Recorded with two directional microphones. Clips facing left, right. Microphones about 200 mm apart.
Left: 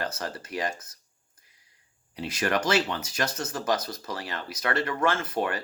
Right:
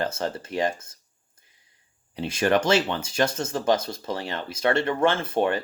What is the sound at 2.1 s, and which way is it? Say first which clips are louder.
Speech: right 5 dB; 25° right (ahead or behind).